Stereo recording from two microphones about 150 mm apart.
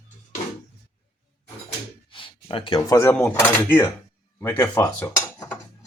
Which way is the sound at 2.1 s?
35° left (ahead or behind).